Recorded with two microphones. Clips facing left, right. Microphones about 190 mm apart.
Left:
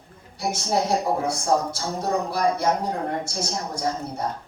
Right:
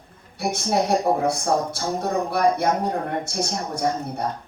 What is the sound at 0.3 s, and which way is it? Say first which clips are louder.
Speech: right 2 dB; 60° right (ahead or behind).